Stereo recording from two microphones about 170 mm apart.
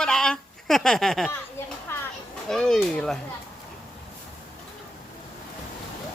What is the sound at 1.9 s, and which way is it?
Children playing, 15° left (ahead or behind).